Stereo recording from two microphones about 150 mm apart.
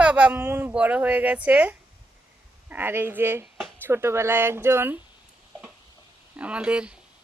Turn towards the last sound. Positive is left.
turn(degrees=-5)  # may be behind; listen again after turning